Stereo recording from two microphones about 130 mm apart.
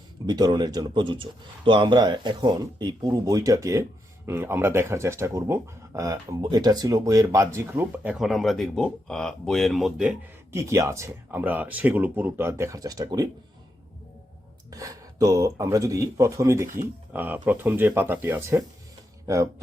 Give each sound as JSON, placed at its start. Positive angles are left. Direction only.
{"t": 0.3, "sound": "speech", "side_deg": -30}
{"t": 10.5, "sound": "speech", "side_deg": -25}
{"t": 14.7, "sound": "speech", "side_deg": -25}